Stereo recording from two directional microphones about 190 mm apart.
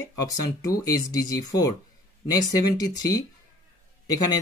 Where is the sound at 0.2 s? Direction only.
20° left (ahead or behind).